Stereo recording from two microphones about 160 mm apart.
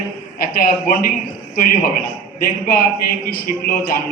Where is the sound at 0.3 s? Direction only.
65° left (ahead or behind).